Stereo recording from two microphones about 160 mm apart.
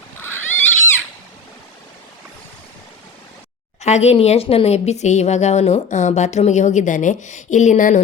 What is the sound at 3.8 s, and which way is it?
Speech, 45° left (ahead or behind).